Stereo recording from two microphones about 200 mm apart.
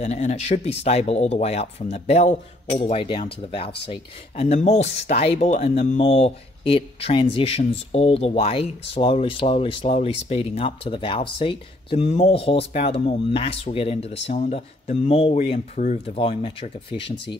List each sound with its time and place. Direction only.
0.0 s speech: 35° left (ahead or behind)